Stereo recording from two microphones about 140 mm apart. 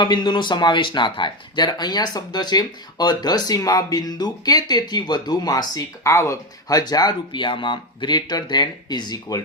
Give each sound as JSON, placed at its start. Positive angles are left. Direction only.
{"t": 0.0, "sound": "speech", "side_deg": 30}